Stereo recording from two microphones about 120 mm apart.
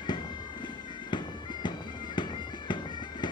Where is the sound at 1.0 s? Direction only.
40° left (ahead or behind).